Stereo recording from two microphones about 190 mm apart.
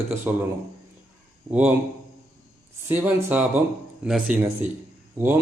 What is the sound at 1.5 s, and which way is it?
Speech, 20° right (ahead or behind).